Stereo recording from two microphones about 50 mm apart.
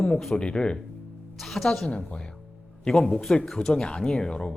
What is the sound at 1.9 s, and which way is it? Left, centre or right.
Speech, left.